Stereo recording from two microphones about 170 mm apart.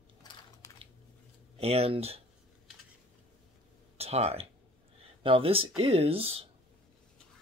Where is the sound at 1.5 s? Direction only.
35° right (ahead or behind).